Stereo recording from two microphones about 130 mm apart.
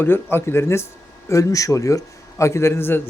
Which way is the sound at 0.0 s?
15° left (ahead or behind).